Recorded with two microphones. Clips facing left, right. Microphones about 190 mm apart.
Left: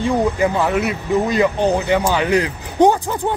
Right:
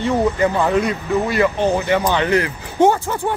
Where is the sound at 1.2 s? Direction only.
15° left (ahead or behind).